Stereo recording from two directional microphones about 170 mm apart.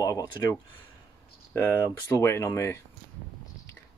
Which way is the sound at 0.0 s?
20° left (ahead or behind).